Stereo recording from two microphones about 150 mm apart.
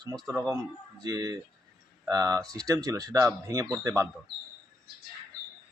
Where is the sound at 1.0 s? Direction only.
25° right (ahead or behind).